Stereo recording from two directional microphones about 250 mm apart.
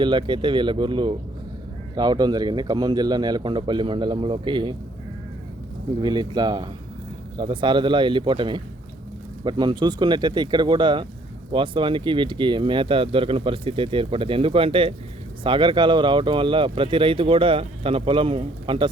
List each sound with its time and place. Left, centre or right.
0.0 s a man's voice: centre
6.0 s a man's voice: centre